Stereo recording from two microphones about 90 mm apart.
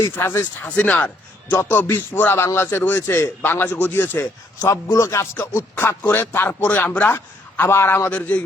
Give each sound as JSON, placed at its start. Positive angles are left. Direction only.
{"t": 0.0, "sound": "a man's voice", "side_deg": 25}
{"t": 0.6, "sound": "a man's voice", "side_deg": 15}